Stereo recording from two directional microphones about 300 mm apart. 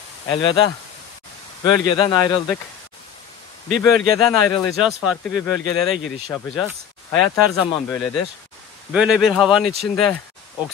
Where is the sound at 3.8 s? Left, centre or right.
Centre.